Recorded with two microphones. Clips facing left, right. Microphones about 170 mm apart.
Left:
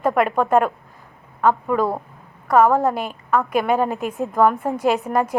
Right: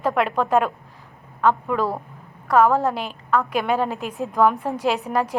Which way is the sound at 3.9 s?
50° left (ahead or behind).